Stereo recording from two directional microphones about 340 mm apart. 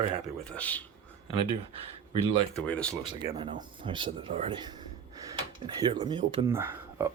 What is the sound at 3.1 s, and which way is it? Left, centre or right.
Speech, centre.